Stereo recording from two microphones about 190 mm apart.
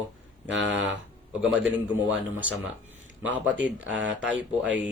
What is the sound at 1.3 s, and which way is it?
Speech, 5° right (ahead or behind).